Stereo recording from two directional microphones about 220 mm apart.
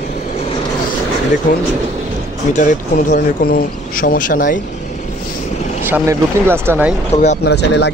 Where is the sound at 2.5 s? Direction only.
35° left (ahead or behind).